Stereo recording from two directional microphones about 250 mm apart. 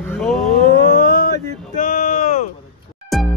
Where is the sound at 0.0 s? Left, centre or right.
Centre.